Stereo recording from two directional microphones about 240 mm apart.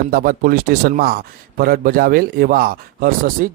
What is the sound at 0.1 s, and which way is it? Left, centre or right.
A man's voice, right.